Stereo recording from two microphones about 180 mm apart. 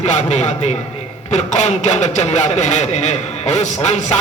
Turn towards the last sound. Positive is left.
turn(degrees=40)  # may be behind; listen again after turning